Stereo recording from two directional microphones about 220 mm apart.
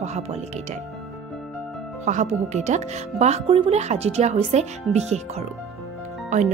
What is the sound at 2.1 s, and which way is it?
Speech, 30° right (ahead or behind).